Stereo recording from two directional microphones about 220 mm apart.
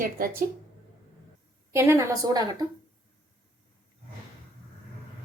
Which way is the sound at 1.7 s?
10° right (ahead or behind).